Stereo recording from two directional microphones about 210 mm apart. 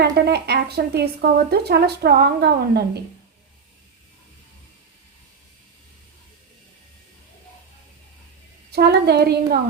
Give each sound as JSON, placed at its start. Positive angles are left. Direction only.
{"t": 0.0, "sound": "a woman's voice", "side_deg": -50}
{"t": 8.7, "sound": "a woman's voice", "side_deg": -50}